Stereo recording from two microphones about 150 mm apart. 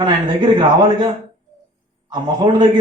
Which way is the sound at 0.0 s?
30° right (ahead or behind).